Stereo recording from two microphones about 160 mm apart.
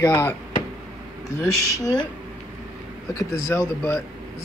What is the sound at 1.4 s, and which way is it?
Speech, 25° left (ahead or behind).